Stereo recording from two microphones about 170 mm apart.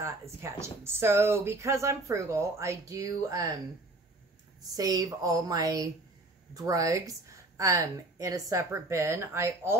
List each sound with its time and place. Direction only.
0.0 s speech: 15° right (ahead or behind)
4.7 s a woman's voice: 20° right (ahead or behind)